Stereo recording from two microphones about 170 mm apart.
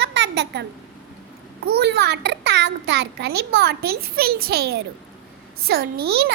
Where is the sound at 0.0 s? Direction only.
80° right.